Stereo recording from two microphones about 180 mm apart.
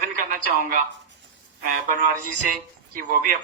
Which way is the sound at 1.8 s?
50° right (ahead or behind).